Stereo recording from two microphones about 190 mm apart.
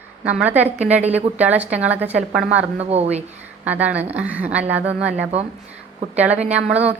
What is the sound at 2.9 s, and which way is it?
Speech, 35° right (ahead or behind).